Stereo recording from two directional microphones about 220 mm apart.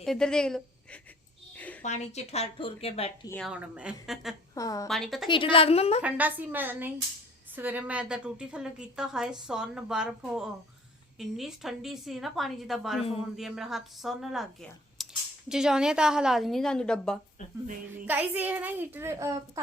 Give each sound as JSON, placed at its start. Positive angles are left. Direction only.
{"t": 0.0, "sound": "a woman's voice", "side_deg": 0}
{"t": 1.5, "sound": "a sound", "side_deg": 5}
{"t": 1.8, "sound": "speech", "side_deg": 30}
{"t": 3.2, "sound": "a woman's voice", "side_deg": 5}
{"t": 3.5, "sound": "a woman's voice", "side_deg": -5}
{"t": 4.5, "sound": "a woman's voice", "side_deg": 15}
{"t": 4.9, "sound": "a woman's voice", "side_deg": 0}
{"t": 5.3, "sound": "speech", "side_deg": 25}
{"t": 6.0, "sound": "a child's voice", "side_deg": -5}
{"t": 18.0, "sound": "a child's voice", "side_deg": -10}